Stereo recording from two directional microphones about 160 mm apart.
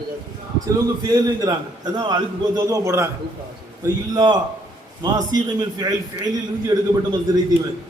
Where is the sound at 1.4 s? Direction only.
25° right (ahead or behind).